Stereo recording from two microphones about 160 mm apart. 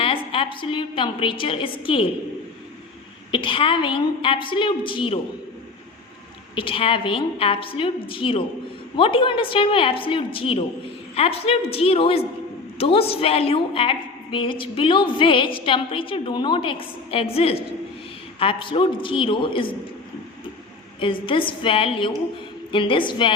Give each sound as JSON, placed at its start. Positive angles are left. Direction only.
{"t": 0.0, "sound": "a woman's voice", "side_deg": 35}
{"t": 3.3, "sound": "a woman's voice", "side_deg": 30}
{"t": 6.6, "sound": "a woman's voice", "side_deg": 35}
{"t": 21.0, "sound": "a woman's voice", "side_deg": 30}